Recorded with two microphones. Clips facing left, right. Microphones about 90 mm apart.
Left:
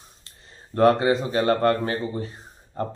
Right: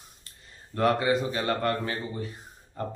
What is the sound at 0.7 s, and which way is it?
A man's voice, 35° left (ahead or behind).